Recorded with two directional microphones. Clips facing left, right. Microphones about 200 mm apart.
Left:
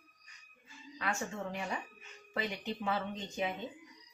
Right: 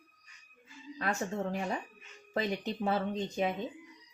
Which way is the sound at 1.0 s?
40° right (ahead or behind).